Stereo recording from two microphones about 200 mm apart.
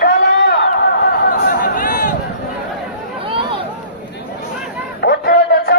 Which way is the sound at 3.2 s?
25° right (ahead or behind).